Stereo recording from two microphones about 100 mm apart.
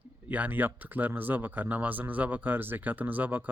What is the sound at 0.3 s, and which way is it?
Speech, 15° right (ahead or behind).